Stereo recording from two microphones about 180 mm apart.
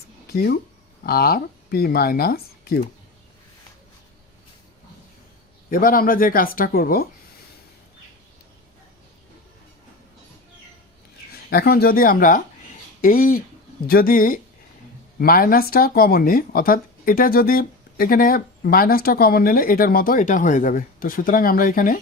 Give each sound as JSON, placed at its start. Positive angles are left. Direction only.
{"t": 1.0, "sound": "speech", "side_deg": 55}
{"t": 5.7, "sound": "speech", "side_deg": 50}
{"t": 11.5, "sound": "speech", "side_deg": 60}